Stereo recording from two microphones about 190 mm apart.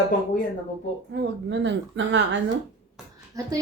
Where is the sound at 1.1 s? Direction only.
65° right (ahead or behind).